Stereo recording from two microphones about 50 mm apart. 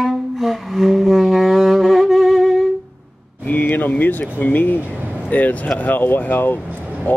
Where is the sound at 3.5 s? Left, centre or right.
Left.